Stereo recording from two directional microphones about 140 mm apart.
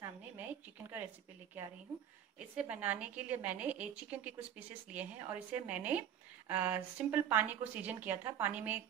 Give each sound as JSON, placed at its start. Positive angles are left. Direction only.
{"t": 0.4, "sound": "a woman's voice", "side_deg": -15}
{"t": 2.3, "sound": "a woman's voice", "side_deg": -10}